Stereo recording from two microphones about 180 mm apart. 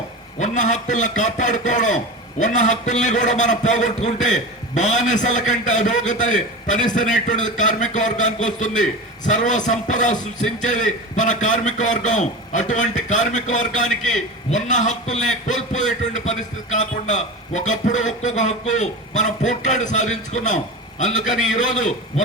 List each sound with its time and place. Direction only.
0.3 s a man's voice: 45° left (ahead or behind)